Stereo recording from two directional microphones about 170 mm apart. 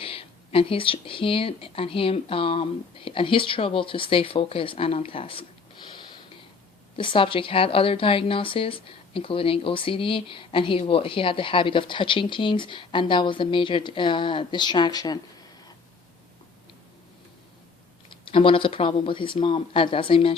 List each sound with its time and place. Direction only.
0.0 s a woman's voice: 35° left (ahead or behind)
18.3 s a woman's voice: 30° left (ahead or behind)